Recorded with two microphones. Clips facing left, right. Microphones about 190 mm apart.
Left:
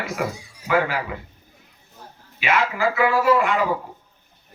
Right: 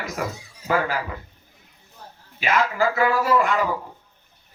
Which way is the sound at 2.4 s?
40° right (ahead or behind).